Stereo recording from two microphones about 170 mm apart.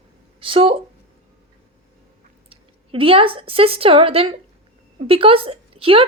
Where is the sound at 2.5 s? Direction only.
35° right (ahead or behind).